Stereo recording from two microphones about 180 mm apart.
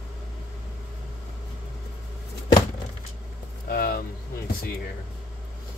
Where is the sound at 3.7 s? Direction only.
55° left (ahead or behind).